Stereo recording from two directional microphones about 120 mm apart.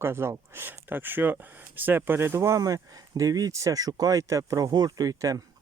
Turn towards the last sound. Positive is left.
turn(degrees=-30)  # may be behind; listen again after turning